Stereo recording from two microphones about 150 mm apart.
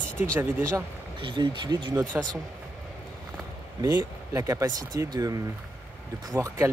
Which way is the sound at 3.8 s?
25° right (ahead or behind).